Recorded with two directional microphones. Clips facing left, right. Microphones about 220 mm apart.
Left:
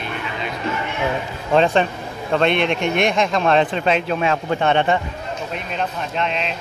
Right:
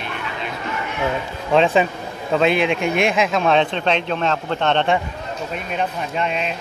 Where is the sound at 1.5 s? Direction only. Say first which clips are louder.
Even; centre (ahead or behind).